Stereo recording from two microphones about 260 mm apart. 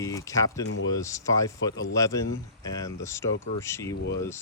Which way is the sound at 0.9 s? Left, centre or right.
Centre.